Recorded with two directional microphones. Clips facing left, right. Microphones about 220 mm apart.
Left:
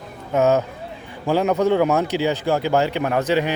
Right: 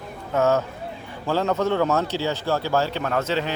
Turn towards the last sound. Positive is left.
turn(degrees=15)  # may be behind; listen again after turning